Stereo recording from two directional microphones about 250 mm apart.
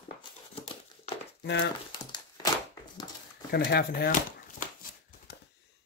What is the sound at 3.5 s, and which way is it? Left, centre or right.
Speech, left.